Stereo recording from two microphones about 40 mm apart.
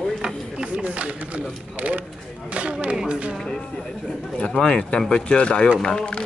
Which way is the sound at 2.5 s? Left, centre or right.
Right.